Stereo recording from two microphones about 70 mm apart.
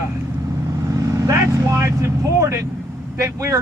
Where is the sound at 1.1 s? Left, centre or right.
Right.